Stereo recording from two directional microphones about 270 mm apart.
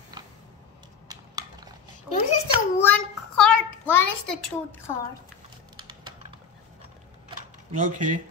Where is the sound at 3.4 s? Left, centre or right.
Centre.